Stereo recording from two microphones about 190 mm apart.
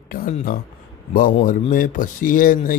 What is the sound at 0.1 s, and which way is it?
Speech, 50° left (ahead or behind).